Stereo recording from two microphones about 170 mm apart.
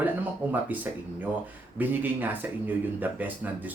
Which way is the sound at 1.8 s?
10° right (ahead or behind).